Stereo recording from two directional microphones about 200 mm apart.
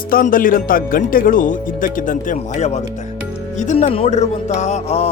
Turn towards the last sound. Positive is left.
turn(degrees=30)  # may be behind; listen again after turning